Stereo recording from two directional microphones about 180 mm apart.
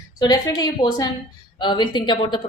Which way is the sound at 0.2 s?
20° left (ahead or behind).